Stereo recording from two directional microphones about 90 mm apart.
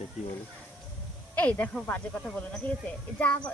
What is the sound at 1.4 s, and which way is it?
Speech, 20° left (ahead or behind).